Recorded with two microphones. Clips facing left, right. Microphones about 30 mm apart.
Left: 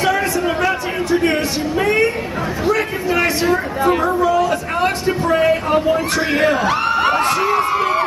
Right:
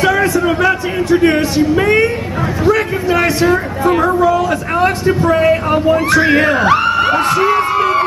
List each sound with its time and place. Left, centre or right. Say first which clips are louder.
0.5 s a sound: right 5 dB; centre
1.8 s a woman's voice: right 2 dB; right
4.2 s a man's voice: right 3 dB; centre
5.9 s speech: right 6 dB; right
6.9 s crowd: right 3 dB; centre
7.4 s a sound: right 4 dB; right